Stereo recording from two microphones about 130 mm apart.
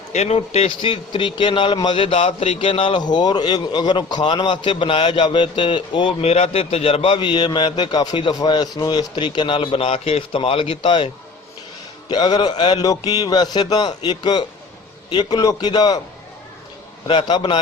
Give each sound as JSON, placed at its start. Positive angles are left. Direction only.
{"t": 0.1, "sound": "a man's voice", "side_deg": 55}
{"t": 6.2, "sound": "a man's voice", "side_deg": 55}
{"t": 17.1, "sound": "a man's voice", "side_deg": 35}